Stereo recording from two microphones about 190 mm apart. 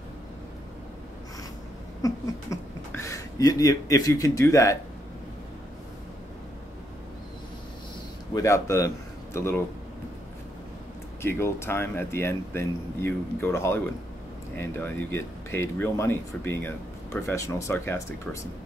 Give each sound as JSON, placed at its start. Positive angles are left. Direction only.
{"t": 2.0, "sound": "speech", "side_deg": 15}
{"t": 8.4, "sound": "a man's voice", "side_deg": 15}
{"t": 11.2, "sound": "speech", "side_deg": 15}